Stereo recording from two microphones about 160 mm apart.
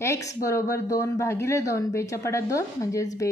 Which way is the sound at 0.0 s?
15° left (ahead or behind).